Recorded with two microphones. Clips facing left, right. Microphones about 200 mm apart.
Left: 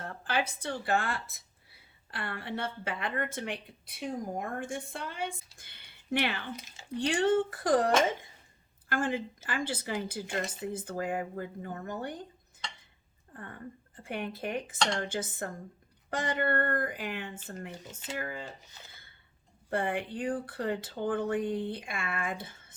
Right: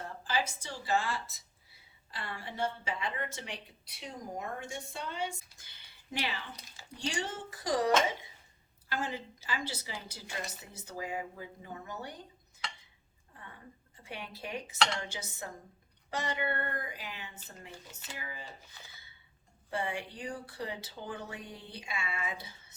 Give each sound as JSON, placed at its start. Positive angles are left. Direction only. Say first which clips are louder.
{"t": 0.3, "sound": "a woman's voice", "louder": "left 3 dB", "side_deg": 60}
{"t": 13.9, "sound": "speech", "louder": "left 8 dB", "side_deg": 50}
{"t": 19.7, "sound": "speech", "louder": "left 5 dB", "side_deg": 55}